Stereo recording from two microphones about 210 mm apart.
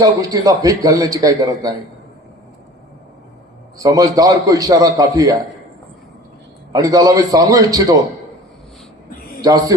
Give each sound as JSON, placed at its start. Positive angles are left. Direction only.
{"t": 0.0, "sound": "a man's voice", "side_deg": -15}
{"t": 3.8, "sound": "a man's voice", "side_deg": -15}
{"t": 6.7, "sound": "a man's voice", "side_deg": -15}
{"t": 9.4, "sound": "a man's voice", "side_deg": -15}